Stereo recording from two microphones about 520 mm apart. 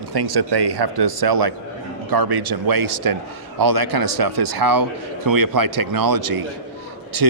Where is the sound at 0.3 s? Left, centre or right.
Right.